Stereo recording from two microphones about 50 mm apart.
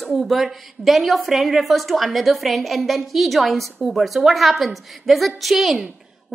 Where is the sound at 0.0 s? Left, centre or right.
Centre.